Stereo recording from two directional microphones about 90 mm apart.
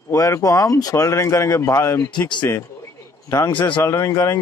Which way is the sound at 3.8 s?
30° left (ahead or behind).